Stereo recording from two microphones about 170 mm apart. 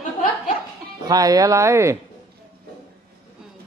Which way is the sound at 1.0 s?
20° right (ahead or behind).